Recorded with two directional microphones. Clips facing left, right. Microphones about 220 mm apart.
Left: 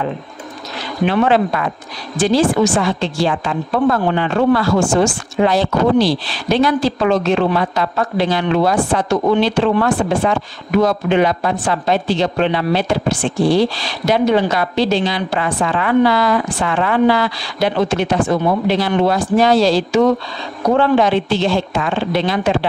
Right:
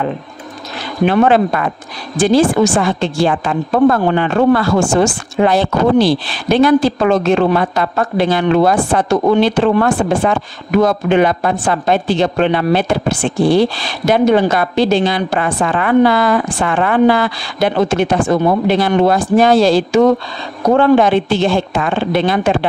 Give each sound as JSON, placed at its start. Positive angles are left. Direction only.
{"t": 1.0, "sound": "speech", "side_deg": -50}